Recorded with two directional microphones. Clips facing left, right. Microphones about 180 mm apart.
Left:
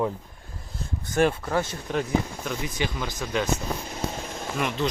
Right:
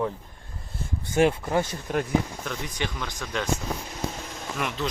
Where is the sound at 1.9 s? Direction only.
Centre (ahead or behind).